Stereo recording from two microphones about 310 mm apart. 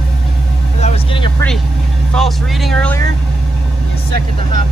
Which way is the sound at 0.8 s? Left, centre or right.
Centre.